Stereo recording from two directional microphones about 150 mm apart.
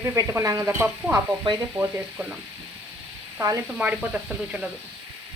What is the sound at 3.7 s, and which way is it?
Speech, 5° right (ahead or behind).